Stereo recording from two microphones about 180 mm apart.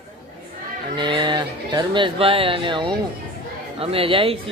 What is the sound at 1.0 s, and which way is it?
Speech, 25° right (ahead or behind).